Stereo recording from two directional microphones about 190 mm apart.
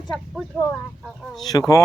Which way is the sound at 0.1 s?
5° left (ahead or behind).